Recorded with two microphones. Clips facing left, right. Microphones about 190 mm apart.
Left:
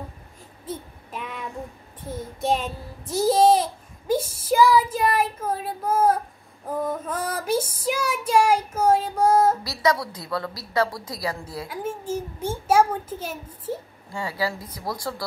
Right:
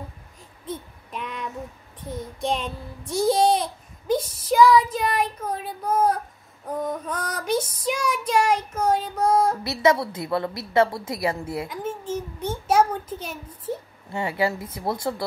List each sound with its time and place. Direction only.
0.7 s child singing: 5° left (ahead or behind)
3.1 s a child's voice: 5° left (ahead or behind)
4.9 s child singing: 5° left (ahead or behind)
6.8 s female singing: 5° left (ahead or behind)
9.6 s a woman's voice: 25° right (ahead or behind)
11.6 s female singing: 10° left (ahead or behind)
14.1 s a woman's voice: 25° right (ahead or behind)